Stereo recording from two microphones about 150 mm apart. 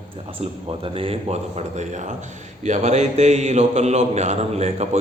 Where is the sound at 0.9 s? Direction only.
40° right (ahead or behind).